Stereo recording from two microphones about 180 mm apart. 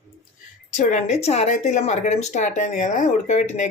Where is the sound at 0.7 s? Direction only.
40° left (ahead or behind).